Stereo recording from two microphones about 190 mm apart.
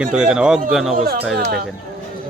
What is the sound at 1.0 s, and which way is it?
Speech, 55° right (ahead or behind).